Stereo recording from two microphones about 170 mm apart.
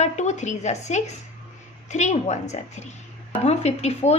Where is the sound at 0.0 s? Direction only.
45° left (ahead or behind).